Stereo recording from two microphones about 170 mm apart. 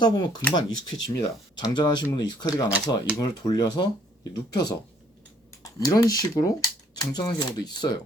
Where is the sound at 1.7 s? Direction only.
25° left (ahead or behind).